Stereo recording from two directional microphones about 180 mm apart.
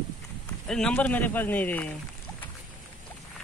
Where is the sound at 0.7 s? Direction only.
5° left (ahead or behind).